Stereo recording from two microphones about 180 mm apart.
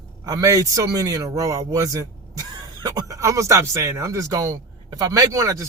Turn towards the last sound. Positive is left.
turn(degrees=-15)  # may be behind; listen again after turning